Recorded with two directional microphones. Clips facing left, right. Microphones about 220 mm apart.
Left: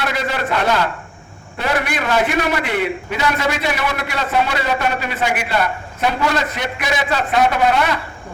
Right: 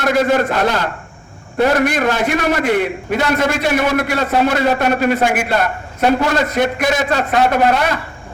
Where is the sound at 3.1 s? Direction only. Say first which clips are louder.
Right 5 dB; 50° right (ahead or behind).